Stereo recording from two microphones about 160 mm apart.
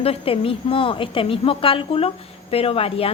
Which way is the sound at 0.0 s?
35° left (ahead or behind).